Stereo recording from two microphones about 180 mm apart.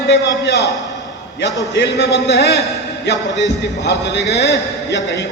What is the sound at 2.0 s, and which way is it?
Speech, 65° left (ahead or behind).